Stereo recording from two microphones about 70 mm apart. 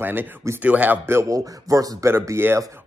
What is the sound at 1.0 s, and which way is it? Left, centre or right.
Speech, right.